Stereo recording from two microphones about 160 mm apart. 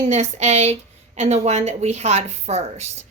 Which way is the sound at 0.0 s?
45° right (ahead or behind).